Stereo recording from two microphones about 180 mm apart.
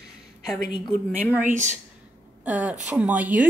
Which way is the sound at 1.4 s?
10° right (ahead or behind).